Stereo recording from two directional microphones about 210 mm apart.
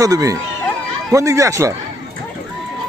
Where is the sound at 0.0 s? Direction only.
15° right (ahead or behind).